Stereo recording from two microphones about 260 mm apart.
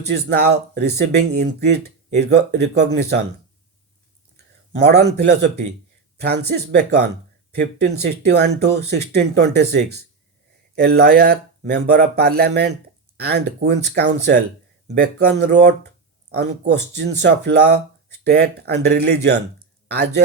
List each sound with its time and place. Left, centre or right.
0.1 s speech: right
4.8 s speech: right